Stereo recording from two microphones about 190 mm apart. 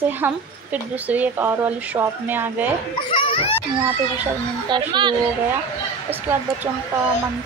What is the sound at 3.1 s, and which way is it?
Speech, 30° left (ahead or behind).